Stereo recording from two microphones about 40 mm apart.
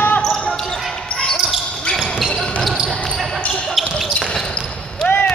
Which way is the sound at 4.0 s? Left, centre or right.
Centre.